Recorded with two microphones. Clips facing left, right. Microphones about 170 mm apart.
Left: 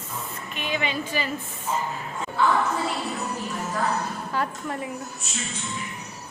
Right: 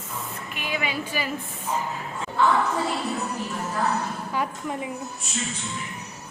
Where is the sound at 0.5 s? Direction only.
10° right (ahead or behind).